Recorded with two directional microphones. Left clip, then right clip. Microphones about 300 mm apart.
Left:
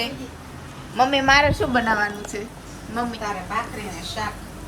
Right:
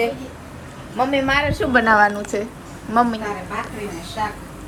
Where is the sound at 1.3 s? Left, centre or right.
Left.